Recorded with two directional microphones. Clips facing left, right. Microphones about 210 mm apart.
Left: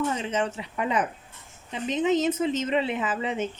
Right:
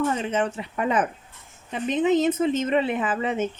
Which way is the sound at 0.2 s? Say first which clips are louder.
Right 3 dB; 55° right (ahead or behind).